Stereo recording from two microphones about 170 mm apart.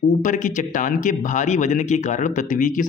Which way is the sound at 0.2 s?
50° left (ahead or behind).